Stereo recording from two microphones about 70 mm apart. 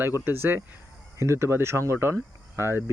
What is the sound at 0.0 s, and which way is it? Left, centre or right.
Speech, right.